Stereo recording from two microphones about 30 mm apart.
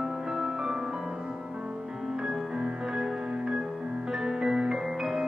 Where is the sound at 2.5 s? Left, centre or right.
Right.